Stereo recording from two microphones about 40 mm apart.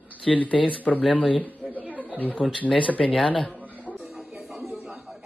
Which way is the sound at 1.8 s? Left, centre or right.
Right.